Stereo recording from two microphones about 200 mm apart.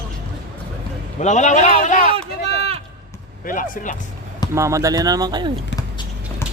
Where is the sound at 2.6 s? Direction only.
30° right (ahead or behind).